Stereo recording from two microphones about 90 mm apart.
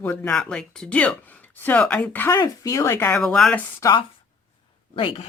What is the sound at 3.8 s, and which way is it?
Speech, 35° left (ahead or behind).